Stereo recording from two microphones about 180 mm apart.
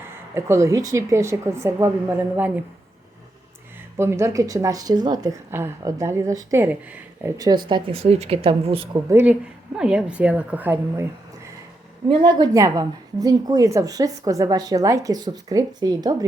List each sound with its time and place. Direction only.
0.3 s speech: 15° right (ahead or behind)
3.9 s a woman's voice: 15° right (ahead or behind); by 9.0 s 30° right (ahead or behind)
9.0 s speech: 10° right (ahead or behind)
12.0 s a woman's voice: 25° right (ahead or behind)